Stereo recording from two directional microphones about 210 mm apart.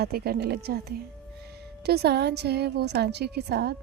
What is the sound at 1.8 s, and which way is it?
Speech, 50° right (ahead or behind).